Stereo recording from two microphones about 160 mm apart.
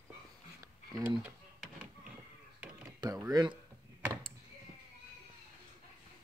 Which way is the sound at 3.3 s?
25° right (ahead or behind).